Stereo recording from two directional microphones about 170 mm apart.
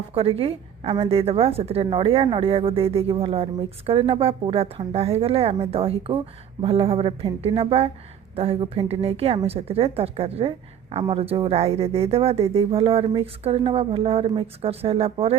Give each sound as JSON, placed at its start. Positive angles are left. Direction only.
{"t": 0.1, "sound": "a woman's voice", "side_deg": -35}